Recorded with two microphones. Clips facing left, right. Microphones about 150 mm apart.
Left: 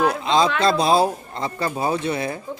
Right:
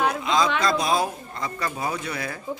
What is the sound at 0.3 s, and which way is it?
Speech, 30° left (ahead or behind).